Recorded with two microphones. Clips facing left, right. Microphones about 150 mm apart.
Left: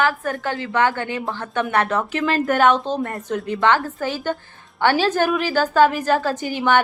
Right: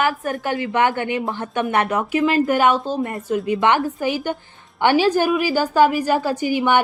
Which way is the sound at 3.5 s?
15° right (ahead or behind).